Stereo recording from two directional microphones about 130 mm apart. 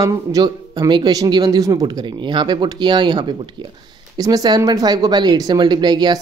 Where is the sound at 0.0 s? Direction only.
30° right (ahead or behind).